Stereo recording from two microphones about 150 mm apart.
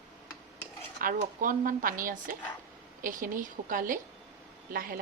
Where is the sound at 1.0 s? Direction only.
65° right (ahead or behind).